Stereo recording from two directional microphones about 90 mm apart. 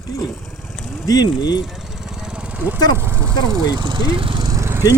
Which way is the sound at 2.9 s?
25° right (ahead or behind).